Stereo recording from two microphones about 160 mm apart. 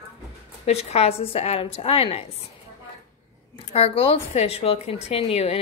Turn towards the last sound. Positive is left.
turn(degrees=40)  # may be behind; listen again after turning